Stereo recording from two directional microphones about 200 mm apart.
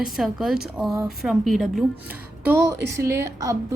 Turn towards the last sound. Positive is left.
turn(degrees=-15)  # may be behind; listen again after turning